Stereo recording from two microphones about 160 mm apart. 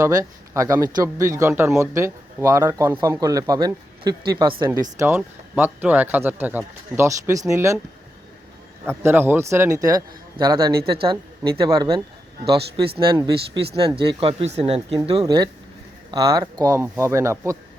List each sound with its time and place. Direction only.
0.0 s speech: 20° right (ahead or behind)
8.9 s speech: 15° right (ahead or behind); by 15.2 s 30° right (ahead or behind)
16.1 s speech: 20° right (ahead or behind)